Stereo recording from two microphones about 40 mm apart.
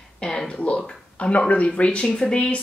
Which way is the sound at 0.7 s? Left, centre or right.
Left.